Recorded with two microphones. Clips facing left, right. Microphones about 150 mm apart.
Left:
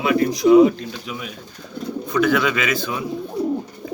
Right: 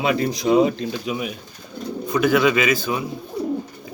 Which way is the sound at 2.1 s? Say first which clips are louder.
Right 1 dB; 10° right (ahead or behind).